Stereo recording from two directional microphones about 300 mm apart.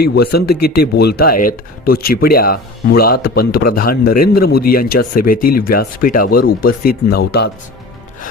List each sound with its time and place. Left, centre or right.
0.0 s speech: left